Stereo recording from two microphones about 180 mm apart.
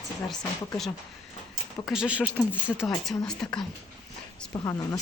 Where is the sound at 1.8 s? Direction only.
5° right (ahead or behind).